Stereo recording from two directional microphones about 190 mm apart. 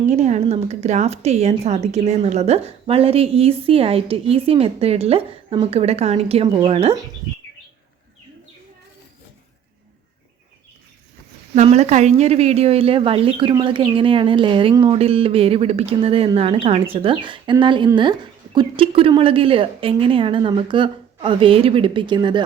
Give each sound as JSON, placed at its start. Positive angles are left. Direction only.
{"t": 0.1, "sound": "speech", "side_deg": -40}
{"t": 11.5, "sound": "a woman's voice", "side_deg": -35}